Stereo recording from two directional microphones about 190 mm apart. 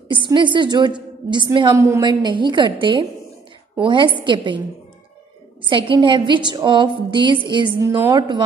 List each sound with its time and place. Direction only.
0.1 s a woman's voice: 25° right (ahead or behind)
5.6 s a woman's voice: 25° right (ahead or behind)